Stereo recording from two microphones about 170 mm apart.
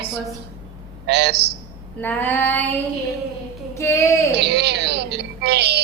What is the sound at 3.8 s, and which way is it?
Female singing, 15° left (ahead or behind).